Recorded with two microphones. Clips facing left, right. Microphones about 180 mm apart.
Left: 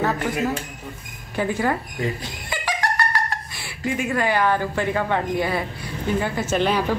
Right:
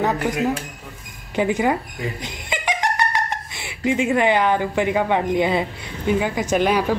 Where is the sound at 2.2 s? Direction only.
20° right (ahead or behind).